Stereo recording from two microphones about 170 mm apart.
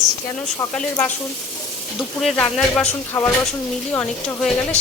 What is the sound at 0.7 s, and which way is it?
Speech, 5° left (ahead or behind).